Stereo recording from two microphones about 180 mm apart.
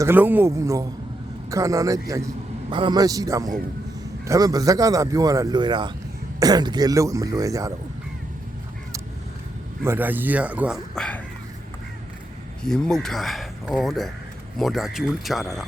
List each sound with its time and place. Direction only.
0.0 s speech: 10° right (ahead or behind)
9.8 s speech: 10° right (ahead or behind)
10.9 s speech: 5° left (ahead or behind)
12.6 s speech: 5° left (ahead or behind)